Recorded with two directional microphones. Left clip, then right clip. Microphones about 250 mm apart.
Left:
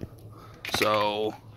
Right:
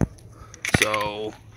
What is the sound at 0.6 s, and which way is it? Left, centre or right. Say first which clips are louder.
Speech: right 2 dB; centre.